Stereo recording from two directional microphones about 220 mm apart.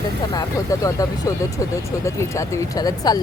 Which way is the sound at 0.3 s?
15° left (ahead or behind).